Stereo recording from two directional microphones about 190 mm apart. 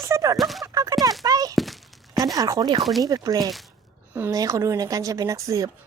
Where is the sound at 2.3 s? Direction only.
20° right (ahead or behind).